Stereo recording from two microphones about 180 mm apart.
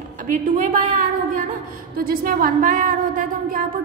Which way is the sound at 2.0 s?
55° right (ahead or behind).